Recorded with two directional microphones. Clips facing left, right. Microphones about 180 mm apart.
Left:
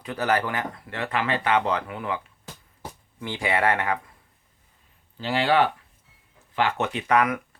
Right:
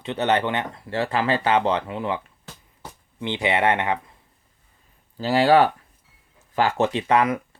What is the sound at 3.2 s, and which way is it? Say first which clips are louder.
Speech: right 3 dB; 20° right (ahead or behind).